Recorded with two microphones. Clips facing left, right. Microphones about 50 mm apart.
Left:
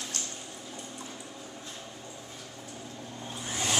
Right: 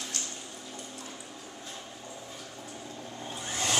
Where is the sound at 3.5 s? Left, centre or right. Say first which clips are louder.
Even; centre.